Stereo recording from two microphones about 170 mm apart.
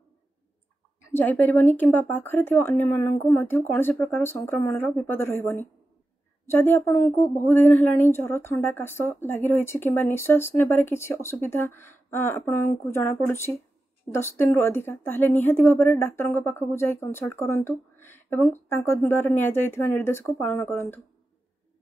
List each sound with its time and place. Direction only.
1.1 s speech: 10° left (ahead or behind)